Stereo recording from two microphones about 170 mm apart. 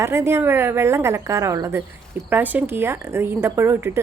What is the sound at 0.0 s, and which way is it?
A woman's voice, 15° right (ahead or behind).